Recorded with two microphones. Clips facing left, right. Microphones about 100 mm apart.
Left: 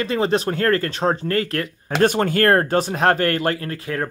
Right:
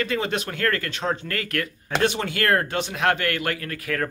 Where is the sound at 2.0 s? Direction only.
45° left (ahead or behind).